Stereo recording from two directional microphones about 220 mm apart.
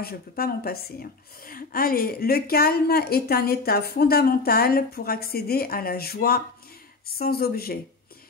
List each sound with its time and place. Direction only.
0.0 s a woman's voice: 45° left (ahead or behind)